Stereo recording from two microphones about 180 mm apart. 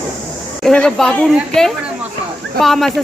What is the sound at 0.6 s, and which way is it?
A child's voice, 5° left (ahead or behind).